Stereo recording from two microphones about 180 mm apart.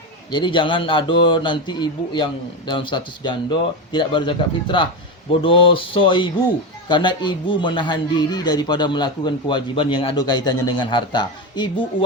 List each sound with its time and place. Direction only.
0.3 s a man's voice: 25° left (ahead or behind)